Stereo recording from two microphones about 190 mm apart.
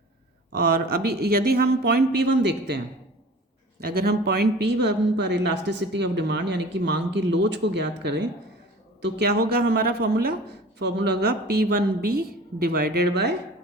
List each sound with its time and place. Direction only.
0.6 s speech: 55° right (ahead or behind)